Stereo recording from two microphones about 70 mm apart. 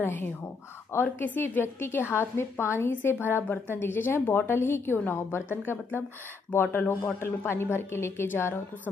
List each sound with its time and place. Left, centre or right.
0.0 s a woman's voice: left